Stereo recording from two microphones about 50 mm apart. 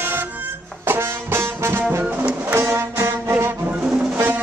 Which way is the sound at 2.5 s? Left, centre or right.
Right.